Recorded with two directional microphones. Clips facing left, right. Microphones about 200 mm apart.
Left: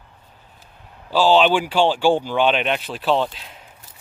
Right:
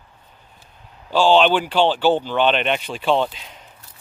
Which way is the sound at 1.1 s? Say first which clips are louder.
Even; 5° left (ahead or behind).